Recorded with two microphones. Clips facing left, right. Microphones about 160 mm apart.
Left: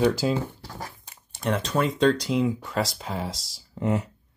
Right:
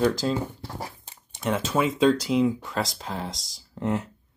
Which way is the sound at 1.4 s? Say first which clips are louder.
Even; 5° right (ahead or behind).